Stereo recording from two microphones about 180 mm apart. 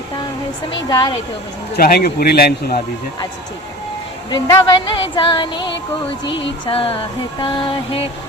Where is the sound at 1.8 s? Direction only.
55° left (ahead or behind).